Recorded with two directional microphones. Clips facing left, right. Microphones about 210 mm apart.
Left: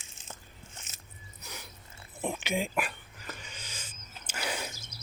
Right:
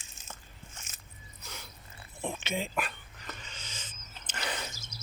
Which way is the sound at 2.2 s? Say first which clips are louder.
Left 3 dB; 15° left (ahead or behind).